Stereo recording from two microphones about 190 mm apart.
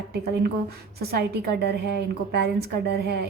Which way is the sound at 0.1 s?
55° right (ahead or behind).